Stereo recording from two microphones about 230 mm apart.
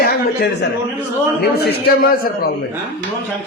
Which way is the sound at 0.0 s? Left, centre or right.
Left.